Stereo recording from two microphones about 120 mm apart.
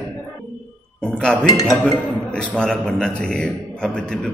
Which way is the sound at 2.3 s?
5° left (ahead or behind).